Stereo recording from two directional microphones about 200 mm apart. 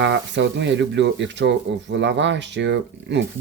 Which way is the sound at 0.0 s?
60° right (ahead or behind).